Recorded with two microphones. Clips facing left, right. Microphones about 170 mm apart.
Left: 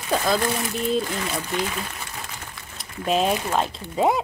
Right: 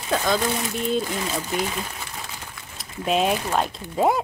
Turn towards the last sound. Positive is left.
turn(degrees=0)  # may be behind; listen again after turning